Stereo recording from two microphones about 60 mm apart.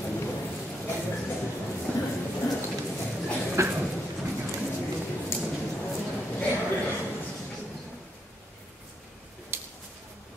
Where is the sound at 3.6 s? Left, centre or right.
Right.